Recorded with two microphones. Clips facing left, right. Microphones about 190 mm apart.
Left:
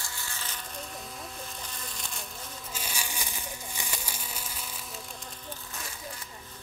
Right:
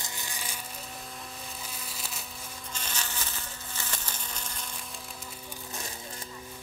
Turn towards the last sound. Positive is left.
turn(degrees=10)  # may be behind; listen again after turning